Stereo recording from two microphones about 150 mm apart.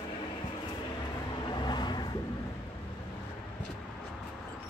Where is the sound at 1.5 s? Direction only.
30° left (ahead or behind).